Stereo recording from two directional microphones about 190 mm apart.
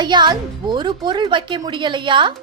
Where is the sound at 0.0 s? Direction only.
25° right (ahead or behind).